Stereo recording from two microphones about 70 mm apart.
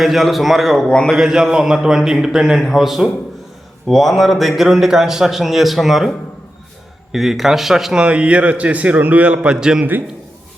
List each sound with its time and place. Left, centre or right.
0.0 s a man's voice: centre
0.9 s speech: centre
1.1 s a man's voice: centre
8.0 s a man's voice: centre